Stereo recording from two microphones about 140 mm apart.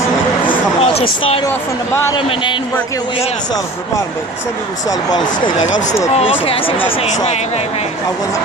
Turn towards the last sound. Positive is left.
turn(degrees=40)  # may be behind; listen again after turning